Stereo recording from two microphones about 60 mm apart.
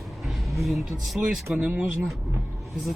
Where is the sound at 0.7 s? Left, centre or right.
Centre.